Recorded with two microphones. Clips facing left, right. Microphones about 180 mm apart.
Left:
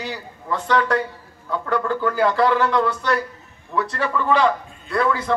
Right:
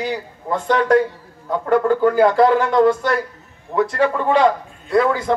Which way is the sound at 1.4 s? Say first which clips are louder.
Right 6 dB; 45° right (ahead or behind).